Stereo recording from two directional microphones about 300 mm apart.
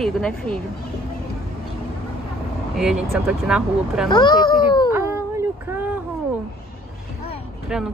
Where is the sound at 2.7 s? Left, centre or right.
Centre.